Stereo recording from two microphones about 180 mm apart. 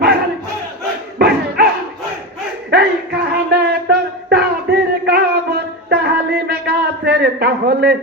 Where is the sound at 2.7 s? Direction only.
70° right (ahead or behind).